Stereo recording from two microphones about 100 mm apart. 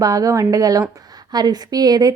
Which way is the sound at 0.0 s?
35° right (ahead or behind).